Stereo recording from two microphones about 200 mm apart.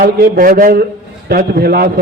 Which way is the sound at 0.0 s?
45° right (ahead or behind).